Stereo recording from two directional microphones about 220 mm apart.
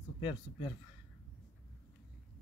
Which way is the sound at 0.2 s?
20° left (ahead or behind).